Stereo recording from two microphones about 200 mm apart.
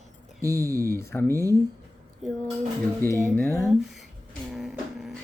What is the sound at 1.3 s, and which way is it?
Speech, 15° right (ahead or behind).